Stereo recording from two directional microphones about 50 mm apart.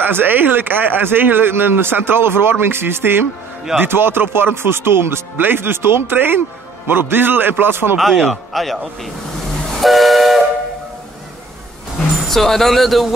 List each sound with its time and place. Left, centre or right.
0.0 s speech: right
8.3 s a man's voice: centre
9.8 s train: centre
12.3 s speech: centre